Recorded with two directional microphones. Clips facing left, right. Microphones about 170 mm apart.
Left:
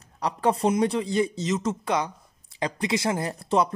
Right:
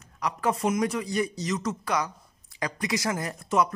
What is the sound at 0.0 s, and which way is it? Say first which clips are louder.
Speech: left 3 dB; 30° left (ahead or behind).